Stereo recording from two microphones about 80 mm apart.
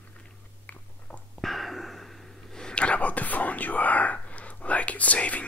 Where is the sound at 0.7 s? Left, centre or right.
Centre.